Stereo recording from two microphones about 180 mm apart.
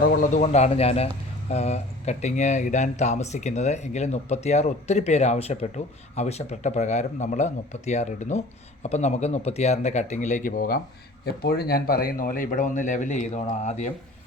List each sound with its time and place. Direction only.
0.0 s a man's voice: 50° left (ahead or behind)